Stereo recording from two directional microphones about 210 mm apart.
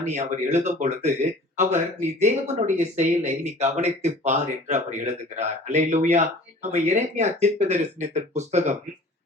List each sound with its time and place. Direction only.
0.0 s speech: 35° right (ahead or behind)